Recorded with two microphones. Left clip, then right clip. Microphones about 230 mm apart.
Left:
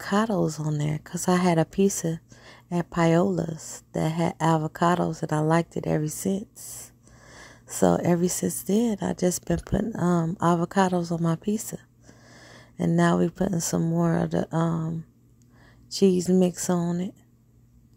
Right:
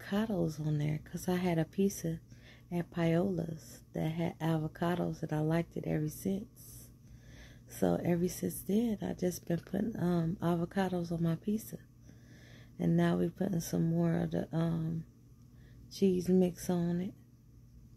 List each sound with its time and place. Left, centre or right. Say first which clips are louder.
0.0 s speech: left 11 dB; left
15.9 s speech: left 9 dB; left